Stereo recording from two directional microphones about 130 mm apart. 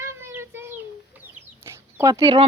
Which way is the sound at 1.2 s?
20° right (ahead or behind).